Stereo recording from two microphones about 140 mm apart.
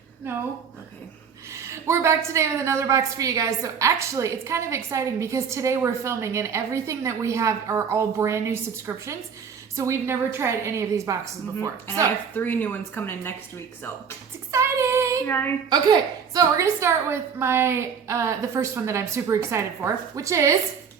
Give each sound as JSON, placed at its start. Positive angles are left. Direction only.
{"t": 1.5, "sound": "a woman's voice", "side_deg": -20}
{"t": 12.3, "sound": "speech", "side_deg": 15}
{"t": 14.5, "sound": "a woman's voice", "side_deg": -20}
{"t": 15.3, "sound": "speech", "side_deg": 15}
{"t": 15.7, "sound": "a woman's voice", "side_deg": -30}